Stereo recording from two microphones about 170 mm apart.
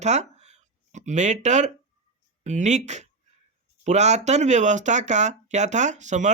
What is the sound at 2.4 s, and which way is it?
Speech, 45° right (ahead or behind).